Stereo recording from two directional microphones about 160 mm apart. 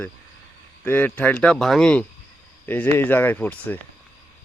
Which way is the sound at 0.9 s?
10° left (ahead or behind).